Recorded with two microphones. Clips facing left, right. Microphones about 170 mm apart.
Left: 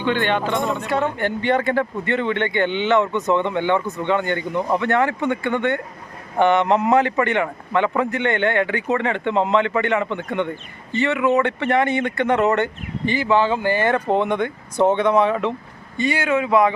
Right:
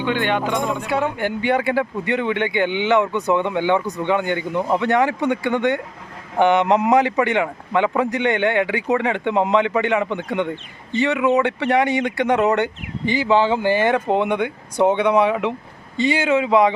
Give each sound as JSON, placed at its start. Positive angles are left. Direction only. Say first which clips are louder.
{"t": 0.3, "sound": "a man's voice", "louder": "even", "side_deg": -10}